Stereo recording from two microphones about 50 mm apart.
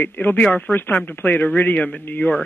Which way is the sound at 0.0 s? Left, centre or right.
Left.